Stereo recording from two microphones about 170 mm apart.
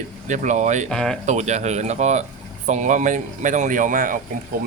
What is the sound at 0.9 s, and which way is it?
Speech, 5° left (ahead or behind).